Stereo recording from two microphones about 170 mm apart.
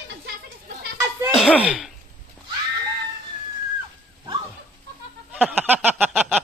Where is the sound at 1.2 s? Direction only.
Centre (ahead or behind).